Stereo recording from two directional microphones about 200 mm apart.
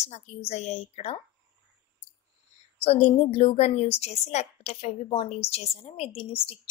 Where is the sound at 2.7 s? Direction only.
30° left (ahead or behind).